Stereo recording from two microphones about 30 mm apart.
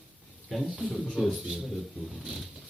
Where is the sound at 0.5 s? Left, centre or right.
Centre.